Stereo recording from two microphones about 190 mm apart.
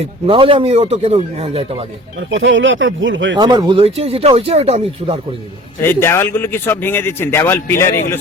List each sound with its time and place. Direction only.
0.3 s speech: 25° right (ahead or behind)
2.3 s speech: 80° right
3.3 s speech: 20° right (ahead or behind)
5.8 s speech: 10° left (ahead or behind)